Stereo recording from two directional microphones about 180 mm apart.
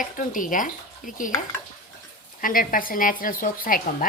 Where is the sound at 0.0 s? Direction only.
45° left (ahead or behind).